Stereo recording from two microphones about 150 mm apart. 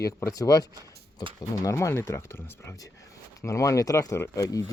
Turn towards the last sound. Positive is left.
turn(degrees=20)  # may be behind; listen again after turning